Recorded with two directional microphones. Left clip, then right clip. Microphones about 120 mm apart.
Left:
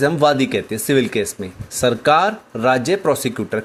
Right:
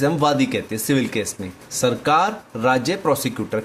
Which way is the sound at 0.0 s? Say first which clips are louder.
Left 3 dB; 45° left (ahead or behind).